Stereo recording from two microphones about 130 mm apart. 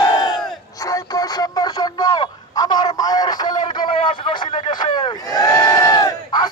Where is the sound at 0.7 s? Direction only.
25° left (ahead or behind).